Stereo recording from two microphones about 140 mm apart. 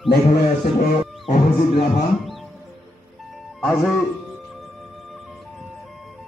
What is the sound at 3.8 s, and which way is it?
Speech, centre (ahead or behind).